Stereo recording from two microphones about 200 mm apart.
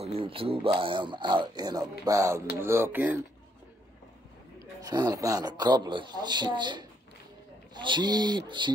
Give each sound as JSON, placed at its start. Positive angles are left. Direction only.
{"t": 0.0, "sound": "speech", "side_deg": -30}
{"t": 4.8, "sound": "speech", "side_deg": -20}